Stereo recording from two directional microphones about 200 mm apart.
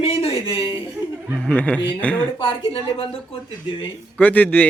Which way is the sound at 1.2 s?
Centre (ahead or behind).